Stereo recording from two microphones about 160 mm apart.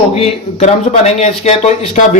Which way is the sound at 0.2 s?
40° left (ahead or behind).